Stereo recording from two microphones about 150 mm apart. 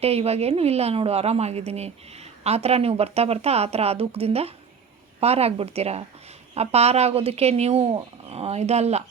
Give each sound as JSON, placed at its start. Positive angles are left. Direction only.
{"t": 0.0, "sound": "a woman's voice", "side_deg": -45}